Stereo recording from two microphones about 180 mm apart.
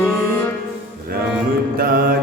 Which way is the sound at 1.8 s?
55° right (ahead or behind).